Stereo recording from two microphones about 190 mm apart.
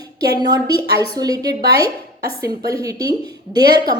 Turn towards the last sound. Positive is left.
turn(degrees=-20)  # may be behind; listen again after turning